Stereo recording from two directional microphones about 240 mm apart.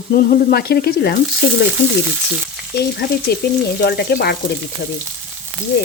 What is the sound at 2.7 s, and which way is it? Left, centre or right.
Speech, left.